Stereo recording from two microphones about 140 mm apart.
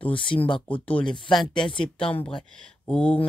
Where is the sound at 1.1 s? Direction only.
35° left (ahead or behind).